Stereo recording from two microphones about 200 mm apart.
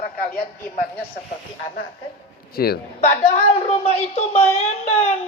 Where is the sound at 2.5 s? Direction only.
50° left (ahead or behind).